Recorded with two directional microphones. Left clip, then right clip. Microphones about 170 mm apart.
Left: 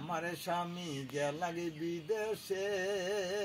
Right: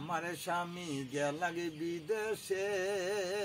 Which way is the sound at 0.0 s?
15° right (ahead or behind).